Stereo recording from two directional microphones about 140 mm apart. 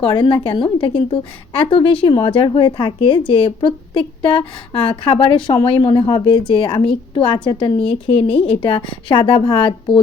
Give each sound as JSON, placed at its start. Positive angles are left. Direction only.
{"t": 0.0, "sound": "a woman's voice", "side_deg": 35}